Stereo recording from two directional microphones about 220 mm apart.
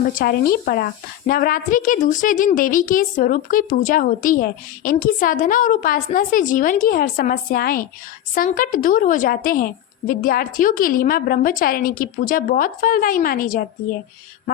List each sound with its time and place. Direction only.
0.1 s a woman's voice: 40° left (ahead or behind)